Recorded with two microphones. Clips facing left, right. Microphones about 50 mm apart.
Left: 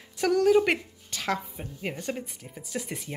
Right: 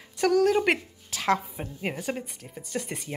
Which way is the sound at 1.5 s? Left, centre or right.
Centre.